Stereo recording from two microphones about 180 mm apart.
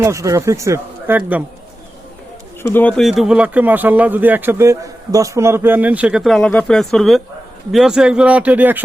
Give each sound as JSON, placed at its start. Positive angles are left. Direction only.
{"t": 0.0, "sound": "a man's voice", "side_deg": -15}
{"t": 2.6, "sound": "a man's voice", "side_deg": 10}